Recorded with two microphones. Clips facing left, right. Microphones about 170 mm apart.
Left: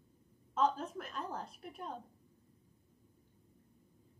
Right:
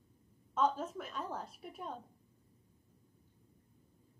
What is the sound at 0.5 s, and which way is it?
A woman's voice, centre (ahead or behind).